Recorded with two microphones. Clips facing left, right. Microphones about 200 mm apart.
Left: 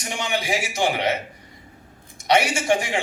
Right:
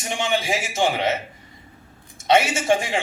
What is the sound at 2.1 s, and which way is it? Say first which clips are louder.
Speech: right 1 dB; 25° right (ahead or behind).